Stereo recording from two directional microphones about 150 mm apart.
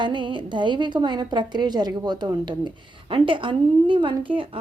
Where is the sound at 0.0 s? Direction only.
30° right (ahead or behind).